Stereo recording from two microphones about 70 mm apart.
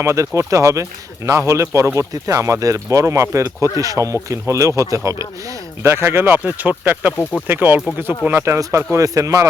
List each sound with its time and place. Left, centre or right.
0.0 s speech: right
5.8 s speech: right
8.5 s speech: right